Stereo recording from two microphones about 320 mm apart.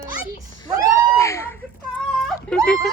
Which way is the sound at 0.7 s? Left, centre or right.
Centre.